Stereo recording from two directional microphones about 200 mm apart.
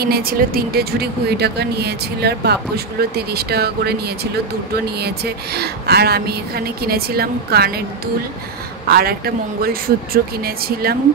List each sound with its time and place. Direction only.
0.0 s a woman's voice: 50° right (ahead or behind)
8.8 s a woman's voice: 50° right (ahead or behind)